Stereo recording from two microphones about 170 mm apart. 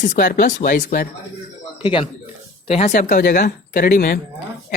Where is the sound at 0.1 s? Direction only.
50° left (ahead or behind).